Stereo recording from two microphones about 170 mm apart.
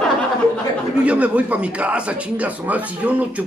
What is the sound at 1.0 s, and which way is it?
Speech, 10° right (ahead or behind).